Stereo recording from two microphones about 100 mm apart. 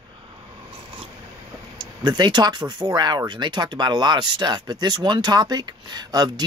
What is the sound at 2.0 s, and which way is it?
Speech, 45° right (ahead or behind).